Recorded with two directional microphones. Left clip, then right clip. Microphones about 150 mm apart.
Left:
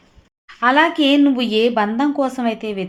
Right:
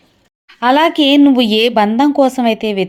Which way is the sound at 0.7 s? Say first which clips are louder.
Right 5 dB; 40° right (ahead or behind).